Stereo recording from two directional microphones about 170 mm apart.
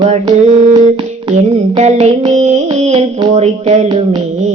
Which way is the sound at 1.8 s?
40° right (ahead or behind).